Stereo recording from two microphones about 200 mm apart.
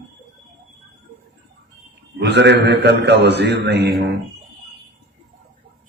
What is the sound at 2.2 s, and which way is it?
A man's voice, 60° right (ahead or behind).